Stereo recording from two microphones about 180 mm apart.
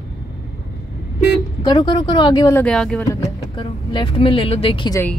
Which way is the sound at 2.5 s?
5° left (ahead or behind).